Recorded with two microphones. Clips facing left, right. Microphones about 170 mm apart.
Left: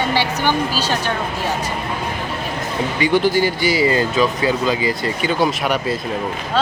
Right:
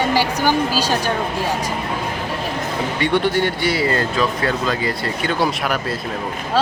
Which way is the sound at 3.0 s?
Centre (ahead or behind).